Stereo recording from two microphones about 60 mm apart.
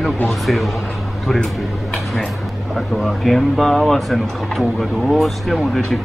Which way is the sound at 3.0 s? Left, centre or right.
Centre.